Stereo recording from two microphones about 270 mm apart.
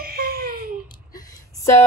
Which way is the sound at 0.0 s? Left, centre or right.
Right.